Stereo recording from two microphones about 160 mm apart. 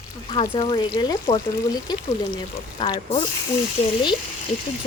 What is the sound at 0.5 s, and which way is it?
Speech, 25° left (ahead or behind).